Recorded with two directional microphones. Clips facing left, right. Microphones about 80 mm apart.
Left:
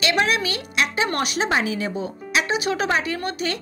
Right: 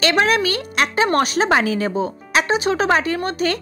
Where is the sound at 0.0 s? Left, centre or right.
Right.